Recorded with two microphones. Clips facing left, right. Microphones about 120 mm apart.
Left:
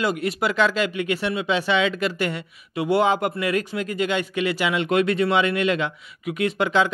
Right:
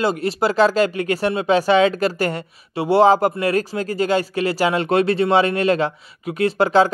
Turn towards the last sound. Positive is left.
turn(degrees=-35)  # may be behind; listen again after turning